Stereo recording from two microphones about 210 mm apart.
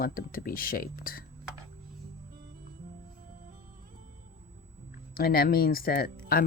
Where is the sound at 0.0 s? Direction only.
45° left (ahead or behind).